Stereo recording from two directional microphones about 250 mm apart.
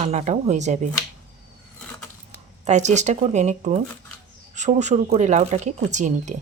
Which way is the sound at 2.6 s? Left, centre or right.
Right.